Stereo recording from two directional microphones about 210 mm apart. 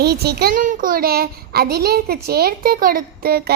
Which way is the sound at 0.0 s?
50° right (ahead or behind).